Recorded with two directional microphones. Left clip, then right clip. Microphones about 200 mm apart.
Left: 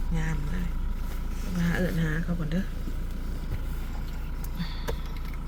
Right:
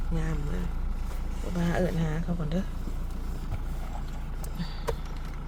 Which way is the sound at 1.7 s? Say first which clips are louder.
Even; 15° right (ahead or behind).